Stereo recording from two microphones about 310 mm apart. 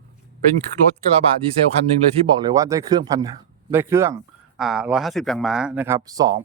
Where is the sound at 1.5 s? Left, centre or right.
Centre.